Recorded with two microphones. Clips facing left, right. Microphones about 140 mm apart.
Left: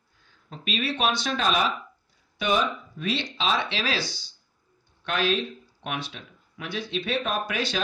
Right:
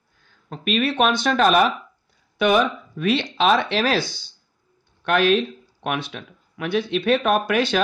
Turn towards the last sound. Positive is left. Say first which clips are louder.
# right 9 dB
turn(degrees=-60)  # may be behind; listen again after turning